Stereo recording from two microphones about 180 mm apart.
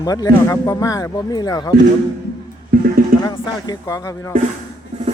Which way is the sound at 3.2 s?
25° left (ahead or behind).